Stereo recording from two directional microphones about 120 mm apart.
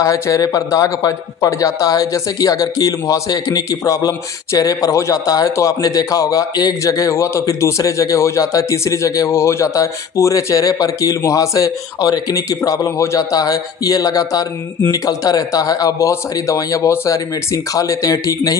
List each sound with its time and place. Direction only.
0.0 s a man's voice: 30° left (ahead or behind)